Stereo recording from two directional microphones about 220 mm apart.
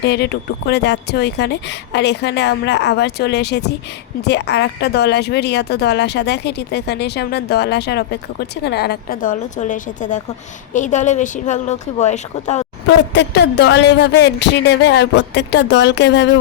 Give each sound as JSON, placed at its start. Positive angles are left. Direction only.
{"t": 0.0, "sound": "speech", "side_deg": 50}
{"t": 13.1, "sound": "speech", "side_deg": 50}